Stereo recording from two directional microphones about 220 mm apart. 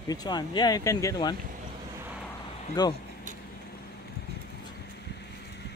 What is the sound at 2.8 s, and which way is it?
Speech, 20° left (ahead or behind).